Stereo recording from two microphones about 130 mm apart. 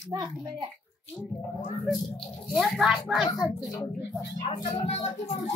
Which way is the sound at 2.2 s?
Centre (ahead or behind).